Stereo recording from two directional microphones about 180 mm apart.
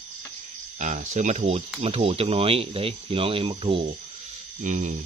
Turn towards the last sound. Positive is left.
turn(degrees=-45)  # may be behind; listen again after turning